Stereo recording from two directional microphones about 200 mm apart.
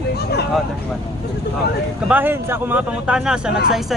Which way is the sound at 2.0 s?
10° right (ahead or behind).